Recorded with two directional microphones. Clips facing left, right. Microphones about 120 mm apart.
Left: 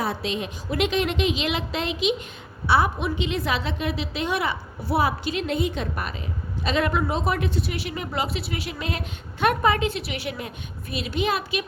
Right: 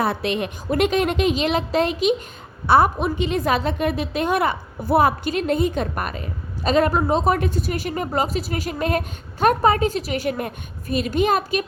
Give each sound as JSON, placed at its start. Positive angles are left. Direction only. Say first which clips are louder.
{"t": 0.0, "sound": "a woman's voice", "louder": "right 5 dB", "side_deg": -60}